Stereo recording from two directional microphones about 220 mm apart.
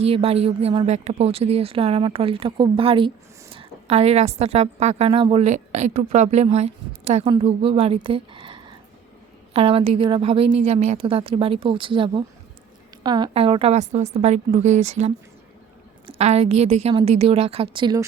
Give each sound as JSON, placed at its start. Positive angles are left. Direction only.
{"t": 0.0, "sound": "a woman's voice", "side_deg": -25}